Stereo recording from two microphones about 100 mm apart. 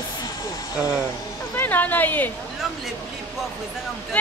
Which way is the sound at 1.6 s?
15° left (ahead or behind).